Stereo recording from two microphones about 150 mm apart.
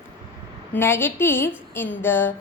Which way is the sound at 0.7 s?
15° left (ahead or behind).